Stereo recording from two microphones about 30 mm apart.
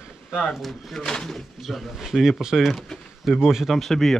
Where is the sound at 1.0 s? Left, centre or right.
Left.